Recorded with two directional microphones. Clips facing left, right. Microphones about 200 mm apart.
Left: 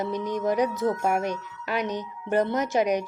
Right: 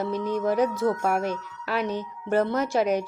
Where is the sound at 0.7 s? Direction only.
20° left (ahead or behind).